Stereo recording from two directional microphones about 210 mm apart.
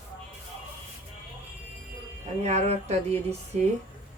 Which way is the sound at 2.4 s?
30° right (ahead or behind).